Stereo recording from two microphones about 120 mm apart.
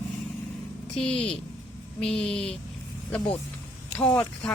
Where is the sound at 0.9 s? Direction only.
5° left (ahead or behind).